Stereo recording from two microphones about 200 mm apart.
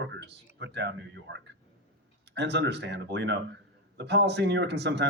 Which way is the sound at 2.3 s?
60° right (ahead or behind).